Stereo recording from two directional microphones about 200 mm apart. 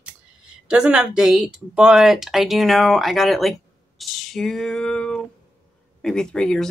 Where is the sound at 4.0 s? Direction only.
Centre (ahead or behind).